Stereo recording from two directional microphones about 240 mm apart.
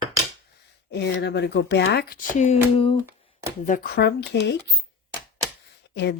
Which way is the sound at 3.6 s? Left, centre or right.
Left.